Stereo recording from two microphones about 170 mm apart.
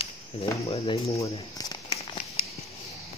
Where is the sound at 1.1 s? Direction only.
20° left (ahead or behind).